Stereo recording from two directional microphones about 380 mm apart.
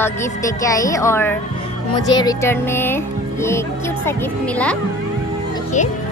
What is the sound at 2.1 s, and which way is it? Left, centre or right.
Music, centre.